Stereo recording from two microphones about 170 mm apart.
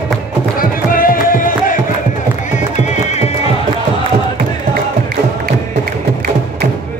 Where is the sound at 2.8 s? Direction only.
40° left (ahead or behind).